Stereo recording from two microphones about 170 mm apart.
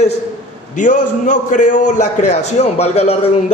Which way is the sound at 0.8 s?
50° left (ahead or behind).